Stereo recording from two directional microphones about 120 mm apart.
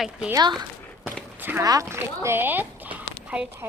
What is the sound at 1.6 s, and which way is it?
Speech, 30° right (ahead or behind).